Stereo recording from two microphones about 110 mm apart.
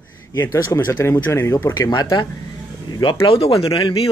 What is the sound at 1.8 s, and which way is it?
Speech, 40° left (ahead or behind).